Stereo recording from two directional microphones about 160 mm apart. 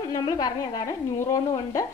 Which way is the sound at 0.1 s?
25° left (ahead or behind).